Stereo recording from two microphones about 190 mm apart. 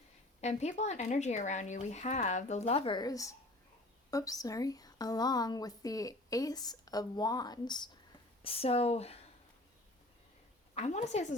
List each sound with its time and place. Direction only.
0.4 s a woman's voice: 35° left (ahead or behind)
10.8 s speech: 35° left (ahead or behind)